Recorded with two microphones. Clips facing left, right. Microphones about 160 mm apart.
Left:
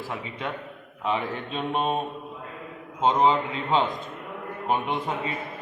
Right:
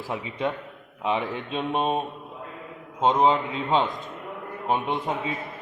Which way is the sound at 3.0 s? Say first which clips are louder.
Right 1 dB; centre (ahead or behind).